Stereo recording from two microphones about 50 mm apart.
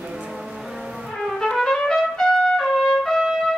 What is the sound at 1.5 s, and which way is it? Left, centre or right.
Trumpet, centre.